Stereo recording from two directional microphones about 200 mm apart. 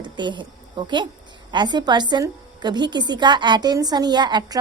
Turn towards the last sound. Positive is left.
turn(degrees=-20)  # may be behind; listen again after turning